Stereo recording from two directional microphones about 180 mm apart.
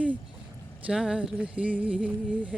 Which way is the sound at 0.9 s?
5° right (ahead or behind).